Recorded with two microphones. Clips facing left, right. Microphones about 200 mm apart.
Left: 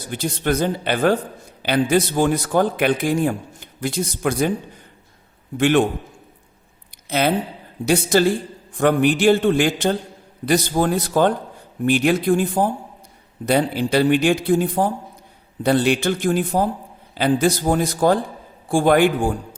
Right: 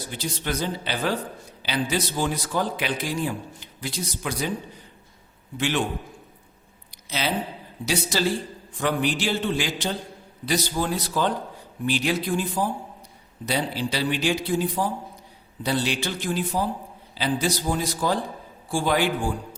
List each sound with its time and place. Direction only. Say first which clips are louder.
0.1 s speech: left 9 dB; 55° left (ahead or behind)
5.5 s speech: left 9 dB; 55° left (ahead or behind)
7.1 s speech: left 7 dB; 55° left (ahead or behind)